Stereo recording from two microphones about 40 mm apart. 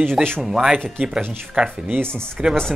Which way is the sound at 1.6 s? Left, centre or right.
Right.